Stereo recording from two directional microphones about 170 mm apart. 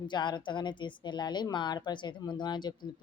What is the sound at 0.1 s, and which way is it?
A woman's voice, 25° left (ahead or behind).